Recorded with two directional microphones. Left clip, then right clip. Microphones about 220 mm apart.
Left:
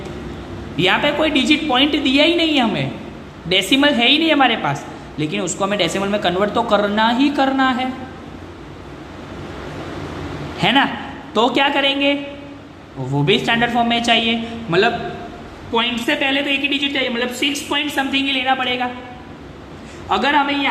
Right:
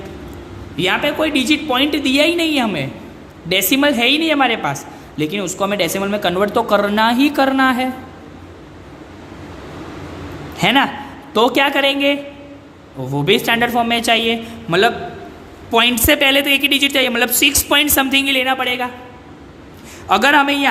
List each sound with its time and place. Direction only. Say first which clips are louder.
0.8 s a woman's voice: left 1 dB; 20° right (ahead or behind)
10.6 s a man's voice: right 1 dB; 25° right (ahead or behind)
13.1 s a woman's voice: right 2 dB; 25° right (ahead or behind)
15.7 s speech: right 5 dB; 50° right (ahead or behind); by 18.9 s 30° right (ahead or behind)
20.1 s speech: right 4 dB; 45° right (ahead or behind)